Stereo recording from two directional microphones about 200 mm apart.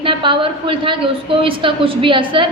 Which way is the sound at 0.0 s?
25° right (ahead or behind).